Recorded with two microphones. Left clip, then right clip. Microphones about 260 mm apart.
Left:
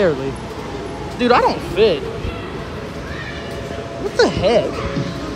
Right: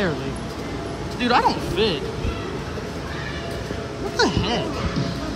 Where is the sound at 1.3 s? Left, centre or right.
Centre.